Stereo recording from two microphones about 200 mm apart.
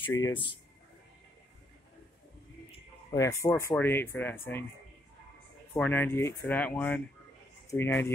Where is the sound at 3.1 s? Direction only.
15° left (ahead or behind).